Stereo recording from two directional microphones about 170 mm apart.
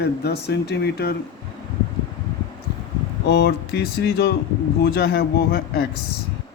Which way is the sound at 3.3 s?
75° left (ahead or behind).